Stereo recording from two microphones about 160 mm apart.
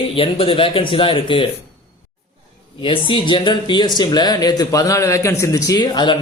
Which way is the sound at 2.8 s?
30° left (ahead or behind).